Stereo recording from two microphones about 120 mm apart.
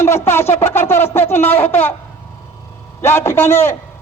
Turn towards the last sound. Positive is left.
turn(degrees=20)  # may be behind; listen again after turning